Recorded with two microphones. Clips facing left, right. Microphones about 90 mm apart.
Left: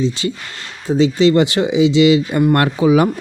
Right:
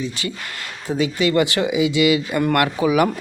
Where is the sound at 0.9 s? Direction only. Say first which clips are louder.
Left 7 dB; 25° left (ahead or behind).